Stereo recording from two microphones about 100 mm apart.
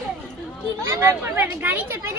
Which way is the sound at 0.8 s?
30° right (ahead or behind).